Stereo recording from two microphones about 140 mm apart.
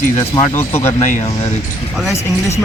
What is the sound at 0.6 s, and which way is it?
Speech, 15° left (ahead or behind).